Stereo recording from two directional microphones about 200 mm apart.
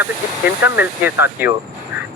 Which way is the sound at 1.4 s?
10° right (ahead or behind).